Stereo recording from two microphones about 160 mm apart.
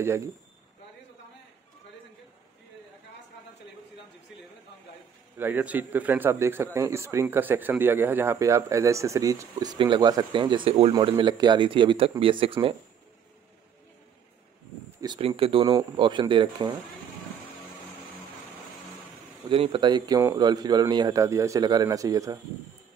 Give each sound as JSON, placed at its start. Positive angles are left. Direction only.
{"t": 5.4, "sound": "speech", "side_deg": -10}
{"t": 15.0, "sound": "speech", "side_deg": -30}
{"t": 19.5, "sound": "speech", "side_deg": -35}